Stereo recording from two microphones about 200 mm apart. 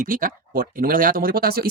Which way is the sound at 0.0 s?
45° right (ahead or behind).